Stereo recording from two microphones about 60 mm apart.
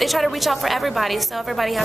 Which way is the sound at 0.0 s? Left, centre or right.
Centre.